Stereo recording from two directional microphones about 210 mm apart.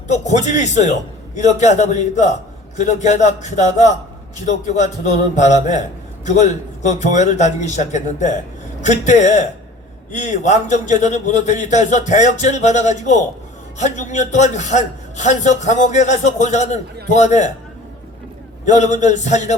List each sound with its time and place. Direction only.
0.1 s a man's voice: 35° left (ahead or behind)
18.6 s a man's voice: 35° left (ahead or behind)